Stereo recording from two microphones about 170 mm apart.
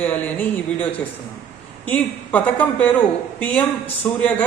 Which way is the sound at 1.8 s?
10° left (ahead or behind).